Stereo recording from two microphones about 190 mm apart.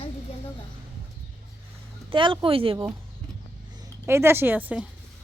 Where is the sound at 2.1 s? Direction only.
25° right (ahead or behind).